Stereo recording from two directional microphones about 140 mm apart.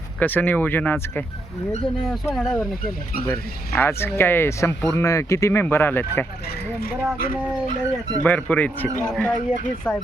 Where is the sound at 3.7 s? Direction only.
15° left (ahead or behind).